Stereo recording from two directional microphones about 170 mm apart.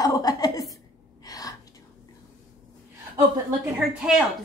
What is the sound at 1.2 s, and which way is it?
Gasp, 20° left (ahead or behind).